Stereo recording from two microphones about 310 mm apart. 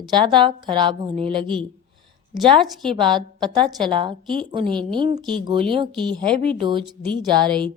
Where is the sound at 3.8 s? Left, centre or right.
Centre.